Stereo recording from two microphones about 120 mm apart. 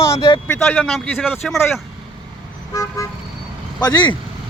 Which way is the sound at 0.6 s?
5° left (ahead or behind).